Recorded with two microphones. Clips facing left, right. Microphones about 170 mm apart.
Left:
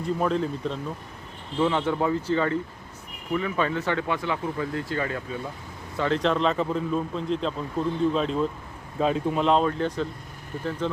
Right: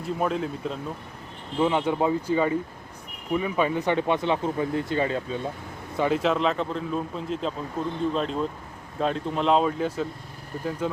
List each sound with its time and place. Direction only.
0.0 s speech: 5° right (ahead or behind)
1.6 s speech: 15° right (ahead or behind)
6.0 s speech: 10° right (ahead or behind)